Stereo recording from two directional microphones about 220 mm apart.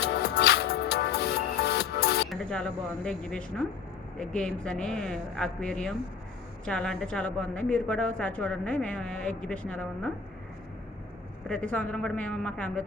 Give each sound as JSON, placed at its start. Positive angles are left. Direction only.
{"t": 0.2, "sound": "music", "side_deg": 50}
{"t": 2.3, "sound": "a woman's voice", "side_deg": 5}
{"t": 11.4, "sound": "a woman's voice", "side_deg": 5}